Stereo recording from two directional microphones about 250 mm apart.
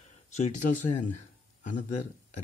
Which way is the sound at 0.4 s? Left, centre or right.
Left.